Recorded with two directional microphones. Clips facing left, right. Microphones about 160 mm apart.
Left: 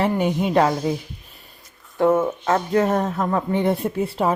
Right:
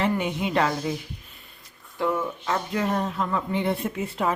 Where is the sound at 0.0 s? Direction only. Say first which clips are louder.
Left 5 dB; 40° left (ahead or behind).